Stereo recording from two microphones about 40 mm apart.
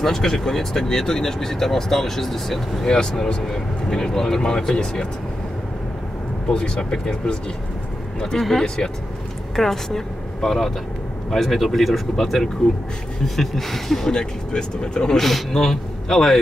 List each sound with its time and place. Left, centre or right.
0.0 s speech: centre
2.9 s speech: centre
6.5 s a man's voice: left; by 12.0 s centre
13.2 s speech: centre
14.1 s speech: centre
15.1 s speech: centre